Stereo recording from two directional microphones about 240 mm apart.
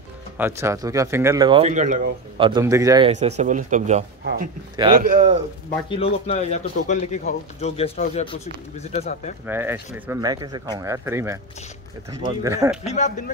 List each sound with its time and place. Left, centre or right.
0.4 s speech: centre
3.1 s speech: right
5.9 s speech: left
9.5 s speech: centre
12.8 s speech: left